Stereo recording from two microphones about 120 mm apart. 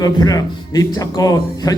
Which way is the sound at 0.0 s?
30° left (ahead or behind).